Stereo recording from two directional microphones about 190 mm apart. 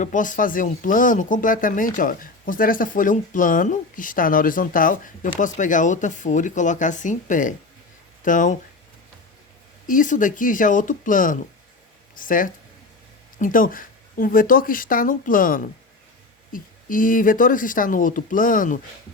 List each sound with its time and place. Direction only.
0.0 s speech: 45° left (ahead or behind)
9.8 s speech: 45° left (ahead or behind)